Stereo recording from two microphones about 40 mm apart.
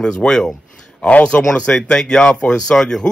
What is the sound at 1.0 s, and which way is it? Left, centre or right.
Speech, left.